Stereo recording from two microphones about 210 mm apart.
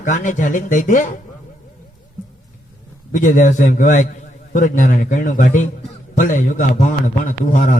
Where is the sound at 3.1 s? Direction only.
40° left (ahead or behind).